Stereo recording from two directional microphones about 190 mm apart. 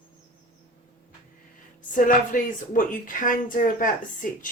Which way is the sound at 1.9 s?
45° left (ahead or behind).